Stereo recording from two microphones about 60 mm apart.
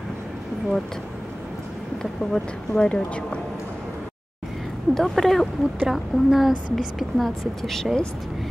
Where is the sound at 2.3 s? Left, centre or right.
Centre.